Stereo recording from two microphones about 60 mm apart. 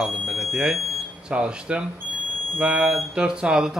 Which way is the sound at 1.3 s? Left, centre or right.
Centre.